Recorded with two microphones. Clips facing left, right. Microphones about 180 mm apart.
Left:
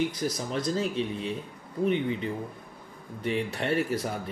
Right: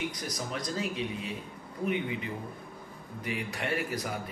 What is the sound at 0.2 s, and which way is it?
Speech, 35° left (ahead or behind).